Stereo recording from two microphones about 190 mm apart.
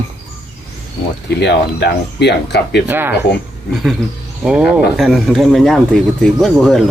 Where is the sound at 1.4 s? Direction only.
65° left (ahead or behind).